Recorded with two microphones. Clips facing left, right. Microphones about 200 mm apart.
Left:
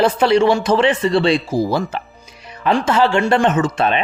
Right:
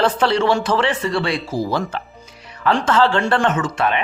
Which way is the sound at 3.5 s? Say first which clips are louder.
Left 3 dB; 25° left (ahead or behind).